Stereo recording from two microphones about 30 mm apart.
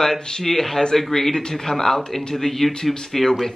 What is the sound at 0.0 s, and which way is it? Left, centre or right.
Speech, centre.